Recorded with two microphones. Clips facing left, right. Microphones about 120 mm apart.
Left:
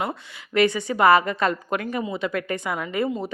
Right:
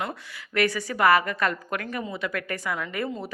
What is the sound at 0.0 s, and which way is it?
Speech, 25° left (ahead or behind).